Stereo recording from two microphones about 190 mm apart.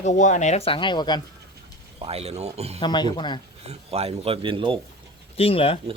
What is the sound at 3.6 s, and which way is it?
Speech, 30° right (ahead or behind).